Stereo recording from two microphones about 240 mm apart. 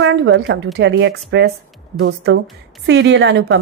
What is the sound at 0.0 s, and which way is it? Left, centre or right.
A woman's voice, right.